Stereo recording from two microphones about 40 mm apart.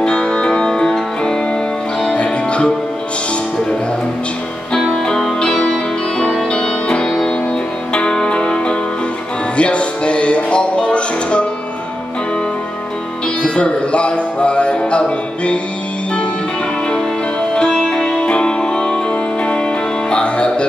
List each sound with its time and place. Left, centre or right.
0.0 s music: left
2.1 s music: left
6.5 s music: centre
13.4 s music: left
16.9 s music: left